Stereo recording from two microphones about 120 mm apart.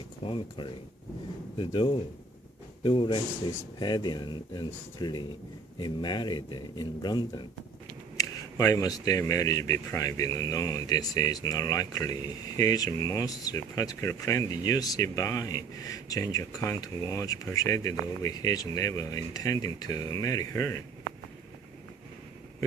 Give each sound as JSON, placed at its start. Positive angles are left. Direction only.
{"t": 0.3, "sound": "speech", "side_deg": 45}
{"t": 3.8, "sound": "speech", "side_deg": 35}